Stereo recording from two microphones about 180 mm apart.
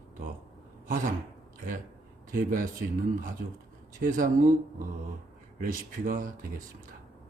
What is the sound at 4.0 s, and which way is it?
Speech, 45° right (ahead or behind).